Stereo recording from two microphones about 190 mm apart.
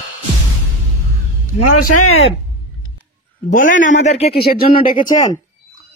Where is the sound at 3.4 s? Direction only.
45° left (ahead or behind).